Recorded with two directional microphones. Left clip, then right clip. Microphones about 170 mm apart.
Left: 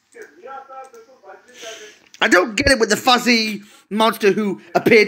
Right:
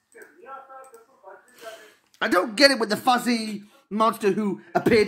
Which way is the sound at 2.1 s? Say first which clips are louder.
Left 6 dB; 10° right (ahead or behind).